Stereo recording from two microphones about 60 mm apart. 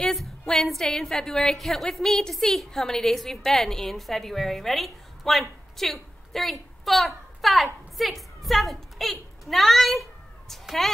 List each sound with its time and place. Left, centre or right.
0.0 s a woman's voice: centre